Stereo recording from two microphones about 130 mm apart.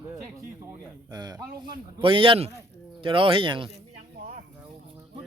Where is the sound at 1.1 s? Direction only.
35° right (ahead or behind).